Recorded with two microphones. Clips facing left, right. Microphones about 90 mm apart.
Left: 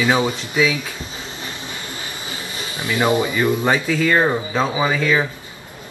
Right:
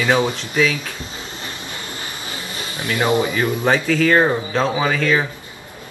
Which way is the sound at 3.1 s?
20° right (ahead or behind).